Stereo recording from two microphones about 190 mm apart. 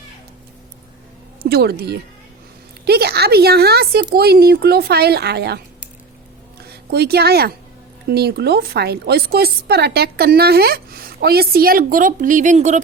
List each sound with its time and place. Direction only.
1.4 s a woman's voice: 55° right (ahead or behind); by 12.8 s 40° right (ahead or behind)